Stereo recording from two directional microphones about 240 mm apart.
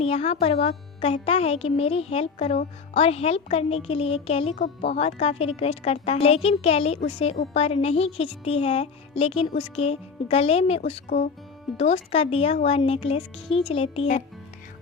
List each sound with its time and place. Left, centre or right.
0.0 s speech: left